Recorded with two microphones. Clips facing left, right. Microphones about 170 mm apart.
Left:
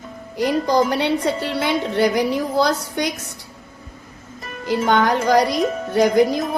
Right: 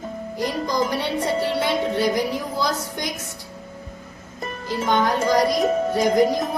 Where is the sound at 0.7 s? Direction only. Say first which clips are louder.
Left 6 dB; 65° left (ahead or behind).